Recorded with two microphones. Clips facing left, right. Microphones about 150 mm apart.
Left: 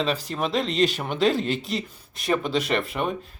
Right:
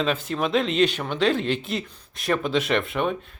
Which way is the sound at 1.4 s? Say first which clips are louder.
Right 1 dB; 40° left (ahead or behind).